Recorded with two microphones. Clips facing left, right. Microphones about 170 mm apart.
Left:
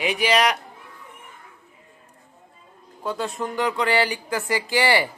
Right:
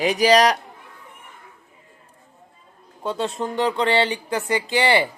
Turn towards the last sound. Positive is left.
turn(degrees=-20)  # may be behind; listen again after turning